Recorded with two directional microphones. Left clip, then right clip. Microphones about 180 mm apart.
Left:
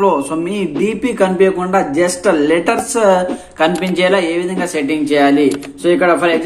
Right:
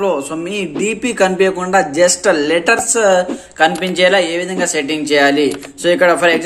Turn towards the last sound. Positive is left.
turn(degrees=-30)  # may be behind; listen again after turning